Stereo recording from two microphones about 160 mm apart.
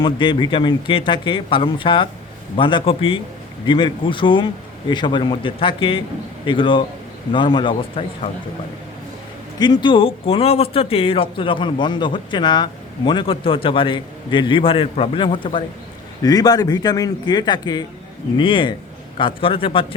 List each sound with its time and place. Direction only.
0.0 s a man's voice: 30° left (ahead or behind)
9.6 s a man's voice: 30° left (ahead or behind)